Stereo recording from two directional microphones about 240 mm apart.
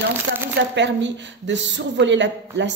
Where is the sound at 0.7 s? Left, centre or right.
Right.